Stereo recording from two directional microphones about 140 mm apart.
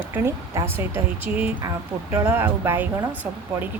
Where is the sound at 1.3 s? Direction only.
15° right (ahead or behind).